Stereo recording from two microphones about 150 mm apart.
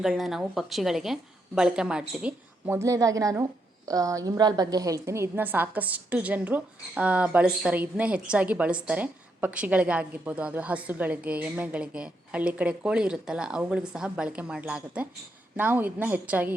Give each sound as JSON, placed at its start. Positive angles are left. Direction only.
{"t": 0.0, "sound": "a woman's voice", "side_deg": 0}